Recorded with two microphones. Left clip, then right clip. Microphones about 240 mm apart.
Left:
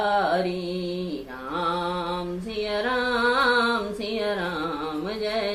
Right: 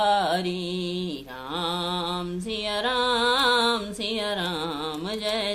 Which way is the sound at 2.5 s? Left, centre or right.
Right.